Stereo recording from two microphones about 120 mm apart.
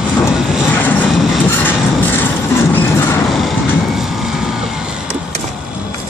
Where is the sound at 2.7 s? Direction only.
20° left (ahead or behind).